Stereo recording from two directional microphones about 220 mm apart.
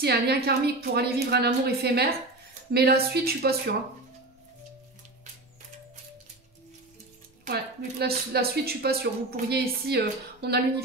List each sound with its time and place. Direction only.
0.0 s a woman's voice: 45° right (ahead or behind)
7.4 s a woman's voice: 45° right (ahead or behind)